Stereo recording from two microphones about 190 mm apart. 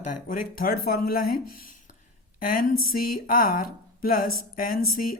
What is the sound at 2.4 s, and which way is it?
Speech, 45° left (ahead or behind).